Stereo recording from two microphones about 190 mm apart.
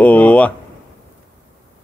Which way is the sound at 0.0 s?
10° left (ahead or behind).